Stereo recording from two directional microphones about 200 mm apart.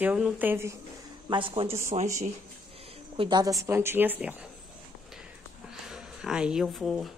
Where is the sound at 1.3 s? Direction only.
25° right (ahead or behind).